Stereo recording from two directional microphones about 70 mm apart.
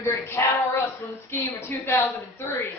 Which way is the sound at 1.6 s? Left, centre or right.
Left.